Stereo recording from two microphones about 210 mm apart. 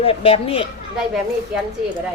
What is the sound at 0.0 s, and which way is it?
Speech, 25° left (ahead or behind).